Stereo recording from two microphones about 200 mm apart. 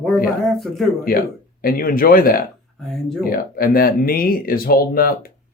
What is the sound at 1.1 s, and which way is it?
Speech, 50° left (ahead or behind).